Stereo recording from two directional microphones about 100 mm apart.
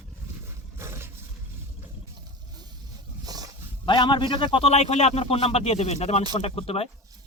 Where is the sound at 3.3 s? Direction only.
40° right (ahead or behind).